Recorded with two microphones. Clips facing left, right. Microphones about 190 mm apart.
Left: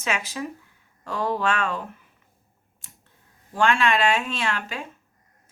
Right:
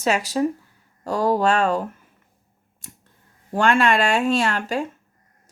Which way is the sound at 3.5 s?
45° right (ahead or behind).